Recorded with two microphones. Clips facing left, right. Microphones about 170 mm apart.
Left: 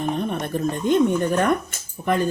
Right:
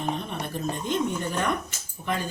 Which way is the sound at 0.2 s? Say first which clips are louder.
Left 8 dB; 55° left (ahead or behind).